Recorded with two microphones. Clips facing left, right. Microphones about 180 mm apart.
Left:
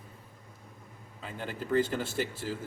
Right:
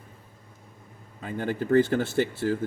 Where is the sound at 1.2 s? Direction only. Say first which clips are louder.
Right 9 dB; 55° right (ahead or behind).